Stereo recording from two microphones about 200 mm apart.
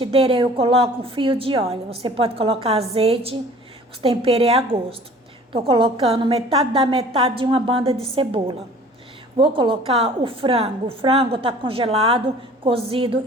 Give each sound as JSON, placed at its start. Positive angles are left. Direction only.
{"t": 0.0, "sound": "a woman's voice", "side_deg": -25}